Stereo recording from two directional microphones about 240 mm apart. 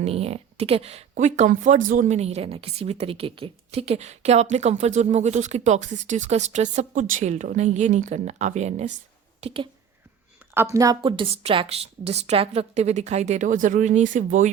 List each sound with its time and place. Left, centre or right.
0.0 s speech: right
9.4 s a sound: right
10.5 s speech: centre; by 14.5 s right